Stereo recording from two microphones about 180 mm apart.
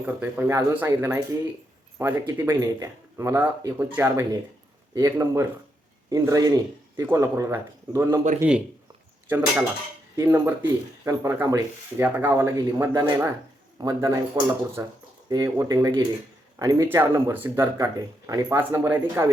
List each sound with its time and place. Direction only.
0.0 s speech: 10° right (ahead or behind)
10.2 s speech: 15° right (ahead or behind)